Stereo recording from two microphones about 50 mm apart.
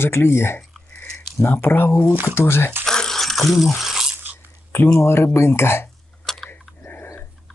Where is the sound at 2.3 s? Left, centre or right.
Left.